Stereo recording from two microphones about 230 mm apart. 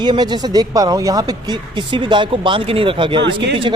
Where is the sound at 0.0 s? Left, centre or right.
Centre.